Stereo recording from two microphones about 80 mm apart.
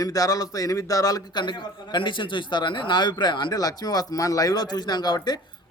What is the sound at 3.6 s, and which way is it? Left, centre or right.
Speech, left.